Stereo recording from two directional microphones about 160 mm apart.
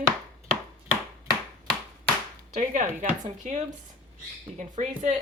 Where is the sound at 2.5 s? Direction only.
55° right (ahead or behind).